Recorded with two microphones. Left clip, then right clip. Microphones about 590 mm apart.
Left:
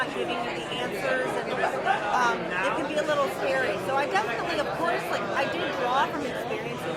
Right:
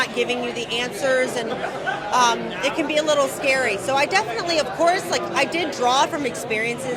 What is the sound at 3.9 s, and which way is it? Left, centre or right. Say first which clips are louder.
Speech: right 7 dB; right.